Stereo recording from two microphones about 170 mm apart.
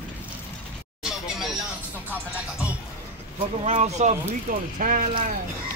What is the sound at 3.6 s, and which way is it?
Speech, 40° right (ahead or behind).